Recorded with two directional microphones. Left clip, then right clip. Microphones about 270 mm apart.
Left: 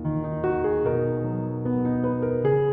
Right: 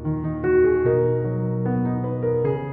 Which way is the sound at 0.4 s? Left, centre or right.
Centre.